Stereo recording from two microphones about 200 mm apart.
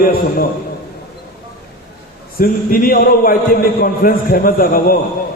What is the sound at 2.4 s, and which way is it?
A man's voice, 45° left (ahead or behind).